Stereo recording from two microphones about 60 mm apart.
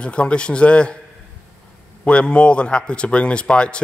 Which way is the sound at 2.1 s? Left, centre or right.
Centre.